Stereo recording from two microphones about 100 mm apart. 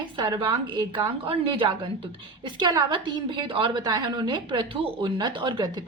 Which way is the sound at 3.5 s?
60° right (ahead or behind).